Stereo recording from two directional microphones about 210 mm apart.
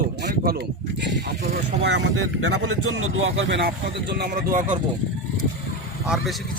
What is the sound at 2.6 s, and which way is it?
A man's voice, 85° right.